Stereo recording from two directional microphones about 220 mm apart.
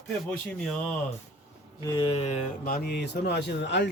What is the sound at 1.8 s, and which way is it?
Speech, 20° left (ahead or behind).